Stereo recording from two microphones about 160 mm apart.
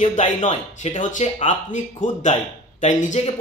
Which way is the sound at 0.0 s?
50° left (ahead or behind).